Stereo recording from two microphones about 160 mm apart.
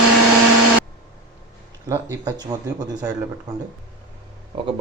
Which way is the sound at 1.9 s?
25° right (ahead or behind).